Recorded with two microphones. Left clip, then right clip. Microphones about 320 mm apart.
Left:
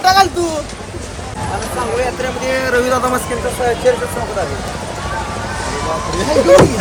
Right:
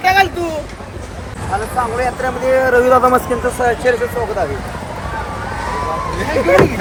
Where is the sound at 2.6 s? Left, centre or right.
Centre.